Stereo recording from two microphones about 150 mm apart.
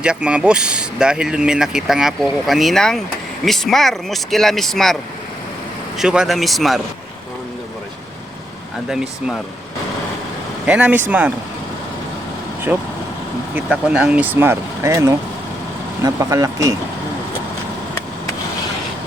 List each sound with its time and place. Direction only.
0.0 s speech: 5° right (ahead or behind)
6.0 s speech: 5° right (ahead or behind)
8.9 s speech: 5° right (ahead or behind)
10.7 s speech: 10° right (ahead or behind)
12.7 s speech: 10° right (ahead or behind)